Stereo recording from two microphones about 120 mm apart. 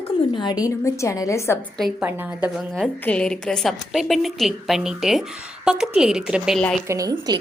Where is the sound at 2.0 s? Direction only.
15° right (ahead or behind).